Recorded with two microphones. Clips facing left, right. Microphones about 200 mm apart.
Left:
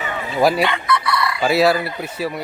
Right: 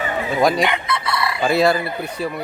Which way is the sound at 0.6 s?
20° right (ahead or behind).